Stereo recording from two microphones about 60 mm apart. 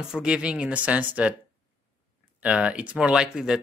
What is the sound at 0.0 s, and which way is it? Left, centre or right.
Speech, centre.